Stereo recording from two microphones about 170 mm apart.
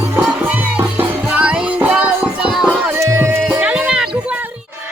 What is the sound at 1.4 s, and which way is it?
Music, 10° right (ahead or behind).